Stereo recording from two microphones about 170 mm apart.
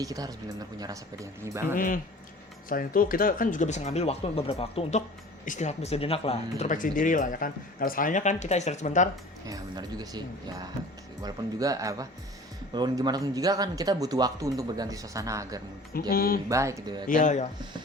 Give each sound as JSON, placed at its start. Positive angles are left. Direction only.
{"t": 0.0, "sound": "speech", "side_deg": -20}
{"t": 1.7, "sound": "speech", "side_deg": 55}
{"t": 6.7, "sound": "speech", "side_deg": 50}
{"t": 9.5, "sound": "speech", "side_deg": -20}
{"t": 15.9, "sound": "speech", "side_deg": 60}
{"t": 16.5, "sound": "speech", "side_deg": -20}
{"t": 17.1, "sound": "speech", "side_deg": 50}